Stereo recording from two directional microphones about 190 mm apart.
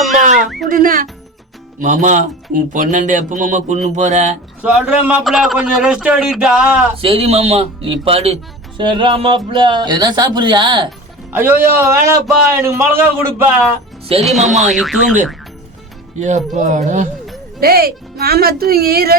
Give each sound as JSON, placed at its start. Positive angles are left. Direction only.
{"t": 0.3, "sound": "a sound", "side_deg": -40}
{"t": 0.7, "sound": "speech", "side_deg": -45}
{"t": 4.6, "sound": "a man's voice", "side_deg": -5}
{"t": 7.0, "sound": "speech", "side_deg": -30}
{"t": 11.3, "sound": "a man's voice", "side_deg": -10}
{"t": 14.2, "sound": "a man's voice", "side_deg": 0}
{"t": 16.1, "sound": "speech", "side_deg": -40}
{"t": 17.6, "sound": "speech", "side_deg": -55}